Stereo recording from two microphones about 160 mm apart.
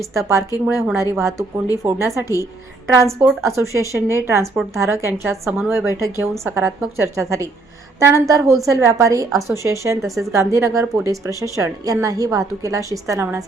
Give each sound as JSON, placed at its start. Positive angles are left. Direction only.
{"t": 0.1, "sound": "a woman's voice", "side_deg": -20}